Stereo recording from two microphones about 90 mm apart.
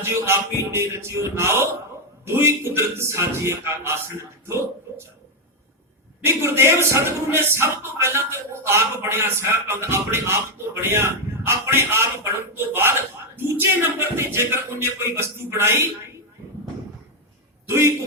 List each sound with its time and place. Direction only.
0.0 s speech: 30° right (ahead or behind)
6.2 s speech: 30° right (ahead or behind)
17.7 s a man's voice: 30° right (ahead or behind)